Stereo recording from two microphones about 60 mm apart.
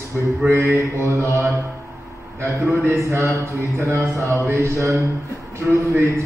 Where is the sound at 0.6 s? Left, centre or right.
Right.